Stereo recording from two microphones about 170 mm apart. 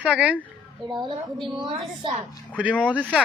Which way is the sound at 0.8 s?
25° right (ahead or behind).